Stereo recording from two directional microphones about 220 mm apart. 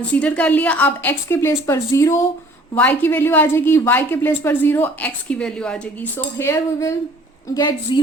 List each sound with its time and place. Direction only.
0.0 s a woman's voice: 5° left (ahead or behind)